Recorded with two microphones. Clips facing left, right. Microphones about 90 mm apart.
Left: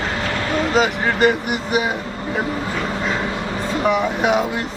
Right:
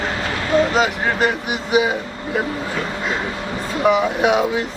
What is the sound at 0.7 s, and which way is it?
Speech, centre (ahead or behind).